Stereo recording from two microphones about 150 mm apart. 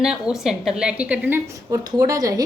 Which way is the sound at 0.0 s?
5° right (ahead or behind).